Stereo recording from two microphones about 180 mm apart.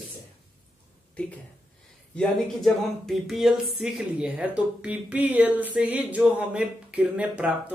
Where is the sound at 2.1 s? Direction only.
5° left (ahead or behind).